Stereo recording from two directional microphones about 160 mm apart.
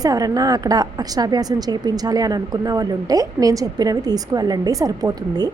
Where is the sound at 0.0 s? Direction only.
20° right (ahead or behind).